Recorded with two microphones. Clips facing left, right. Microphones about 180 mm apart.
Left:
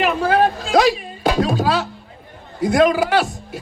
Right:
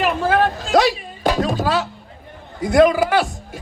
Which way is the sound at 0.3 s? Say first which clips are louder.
Left 1 dB; 40° left (ahead or behind).